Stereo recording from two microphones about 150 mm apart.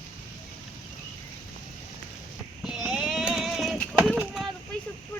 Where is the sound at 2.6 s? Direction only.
5° right (ahead or behind).